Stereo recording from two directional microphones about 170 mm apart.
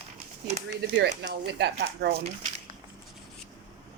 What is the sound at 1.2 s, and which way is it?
Speech, 85° right.